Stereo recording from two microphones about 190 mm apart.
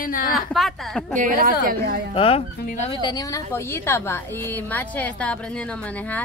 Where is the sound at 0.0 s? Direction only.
50° left (ahead or behind).